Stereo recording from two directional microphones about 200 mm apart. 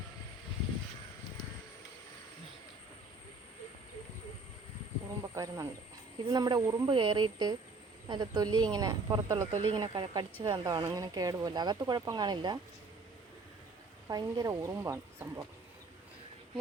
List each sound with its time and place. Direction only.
5.3 s speech: 15° right (ahead or behind)
14.1 s speech: 20° right (ahead or behind)